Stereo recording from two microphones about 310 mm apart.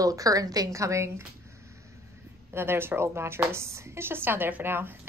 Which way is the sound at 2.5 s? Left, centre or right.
Centre.